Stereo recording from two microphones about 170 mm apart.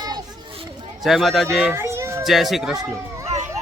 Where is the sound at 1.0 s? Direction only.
Centre (ahead or behind).